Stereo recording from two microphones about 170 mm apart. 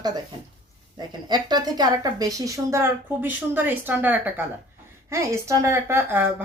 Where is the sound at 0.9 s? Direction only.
25° right (ahead or behind).